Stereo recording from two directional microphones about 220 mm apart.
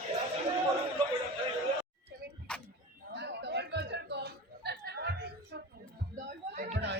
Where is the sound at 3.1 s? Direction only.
50° right (ahead or behind).